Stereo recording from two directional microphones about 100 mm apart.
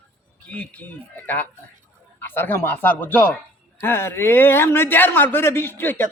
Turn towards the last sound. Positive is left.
turn(degrees=20)  # may be behind; listen again after turning